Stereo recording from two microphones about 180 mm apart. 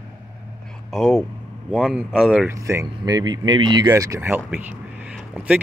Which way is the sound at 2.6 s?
15° right (ahead or behind).